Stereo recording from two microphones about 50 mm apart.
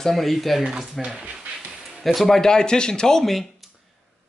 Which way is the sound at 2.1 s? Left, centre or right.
Centre.